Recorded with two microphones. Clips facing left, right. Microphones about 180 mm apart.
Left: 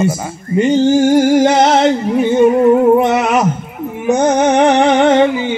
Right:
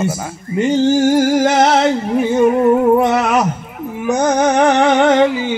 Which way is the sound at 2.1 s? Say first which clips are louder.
Left 2 dB; centre (ahead or behind).